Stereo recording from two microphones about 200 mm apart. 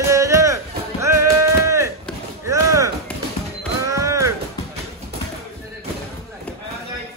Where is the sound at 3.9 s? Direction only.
15° right (ahead or behind).